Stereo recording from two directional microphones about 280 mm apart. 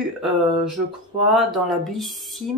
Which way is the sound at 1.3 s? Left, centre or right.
Centre.